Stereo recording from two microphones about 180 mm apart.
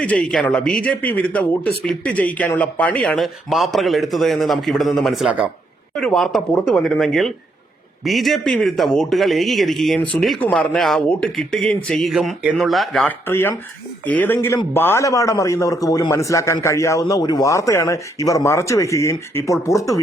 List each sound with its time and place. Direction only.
0.0 s a man's voice: 5° left (ahead or behind)
13.2 s a man's voice: 15° left (ahead or behind)